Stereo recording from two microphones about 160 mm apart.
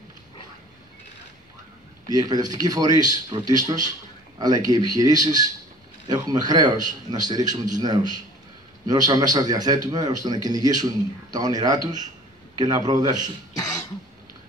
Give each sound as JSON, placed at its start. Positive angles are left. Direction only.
{"t": 2.0, "sound": "a man's voice", "side_deg": -25}